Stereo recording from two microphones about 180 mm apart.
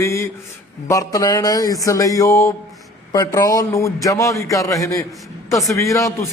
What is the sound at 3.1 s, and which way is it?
Mantra, 20° left (ahead or behind).